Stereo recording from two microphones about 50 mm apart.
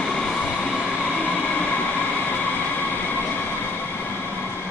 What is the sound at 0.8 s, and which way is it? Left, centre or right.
Train, left.